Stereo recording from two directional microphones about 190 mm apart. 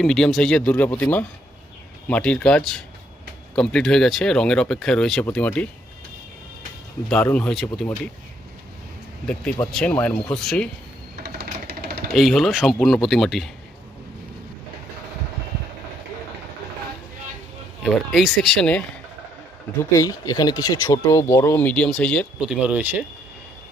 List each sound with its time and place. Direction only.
0.0 s speech: centre (ahead or behind)
7.1 s speech: 5° left (ahead or behind)
9.2 s speech: 5° left (ahead or behind)
11.2 s a sound: 55° right (ahead or behind)
12.1 s speech: centre (ahead or behind)
17.8 s speech: centre (ahead or behind)
19.8 s speech: 20° left (ahead or behind)
22.6 s speech: 5° right (ahead or behind)